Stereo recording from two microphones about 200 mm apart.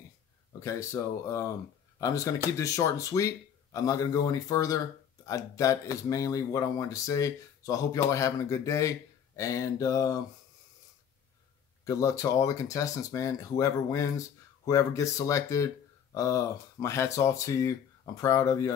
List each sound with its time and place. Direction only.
0.5 s speech: 15° left (ahead or behind)
11.8 s speech: 15° left (ahead or behind)